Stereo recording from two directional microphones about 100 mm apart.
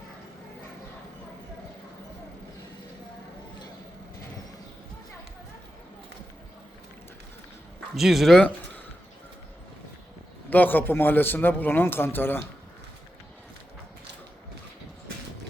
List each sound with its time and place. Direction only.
7.9 s speech: 5° right (ahead or behind)
8.4 s a sound: 15° left (ahead or behind)
10.5 s a man's voice: 20° left (ahead or behind)